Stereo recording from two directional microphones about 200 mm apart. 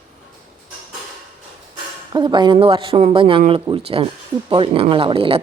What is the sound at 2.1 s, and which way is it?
Speech, 25° right (ahead or behind).